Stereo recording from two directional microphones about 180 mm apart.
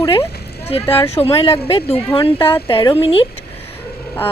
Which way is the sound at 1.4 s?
30° left (ahead or behind).